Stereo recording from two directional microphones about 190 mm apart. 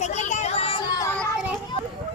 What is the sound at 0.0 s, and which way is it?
Music, 40° left (ahead or behind).